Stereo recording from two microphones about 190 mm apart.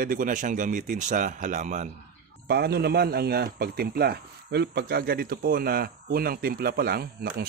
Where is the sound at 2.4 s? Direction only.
55° right (ahead or behind).